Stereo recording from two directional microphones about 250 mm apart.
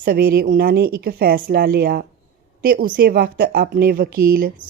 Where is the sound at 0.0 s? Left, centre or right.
Right.